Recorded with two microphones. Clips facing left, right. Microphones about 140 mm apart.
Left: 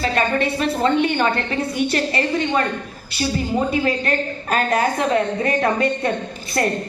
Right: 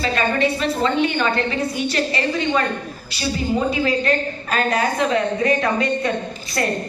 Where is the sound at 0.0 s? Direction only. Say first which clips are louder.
Even; 50° left (ahead or behind).